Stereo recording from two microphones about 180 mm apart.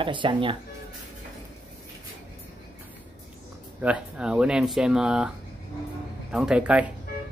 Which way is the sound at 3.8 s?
5° right (ahead or behind).